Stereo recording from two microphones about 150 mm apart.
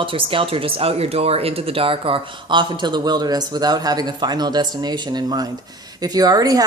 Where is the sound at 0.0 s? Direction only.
35° right (ahead or behind).